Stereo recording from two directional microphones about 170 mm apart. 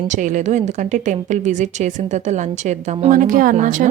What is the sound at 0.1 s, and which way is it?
A woman's voice, 45° right (ahead or behind).